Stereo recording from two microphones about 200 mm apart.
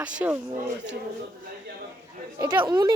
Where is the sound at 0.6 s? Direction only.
40° right (ahead or behind).